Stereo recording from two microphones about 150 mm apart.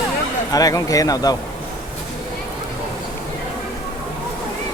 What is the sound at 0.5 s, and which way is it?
Speech, 25° left (ahead or behind).